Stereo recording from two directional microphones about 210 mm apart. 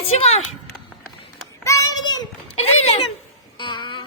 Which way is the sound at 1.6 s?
15° left (ahead or behind).